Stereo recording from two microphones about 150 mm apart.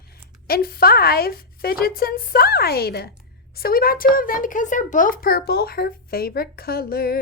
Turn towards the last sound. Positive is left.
turn(degrees=85)